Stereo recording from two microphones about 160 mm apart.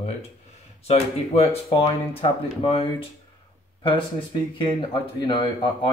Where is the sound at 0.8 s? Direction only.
40° left (ahead or behind).